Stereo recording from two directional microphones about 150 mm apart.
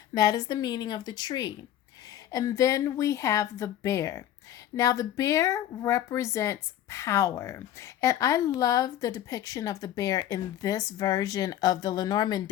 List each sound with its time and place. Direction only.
0.1 s speech: 25° left (ahead or behind)